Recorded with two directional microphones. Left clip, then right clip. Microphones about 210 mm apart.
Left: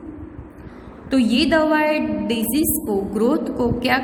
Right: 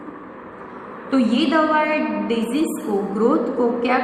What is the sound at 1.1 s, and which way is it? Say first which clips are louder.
A woman's voice: left 1 dB; 50° left (ahead or behind).